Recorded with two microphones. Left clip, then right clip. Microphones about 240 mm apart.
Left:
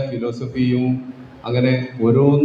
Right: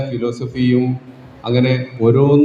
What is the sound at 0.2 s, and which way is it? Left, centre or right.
A man's voice, right.